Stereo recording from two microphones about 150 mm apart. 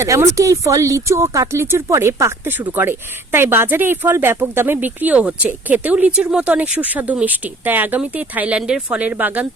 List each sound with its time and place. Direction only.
0.0 s speech: 20° right (ahead or behind)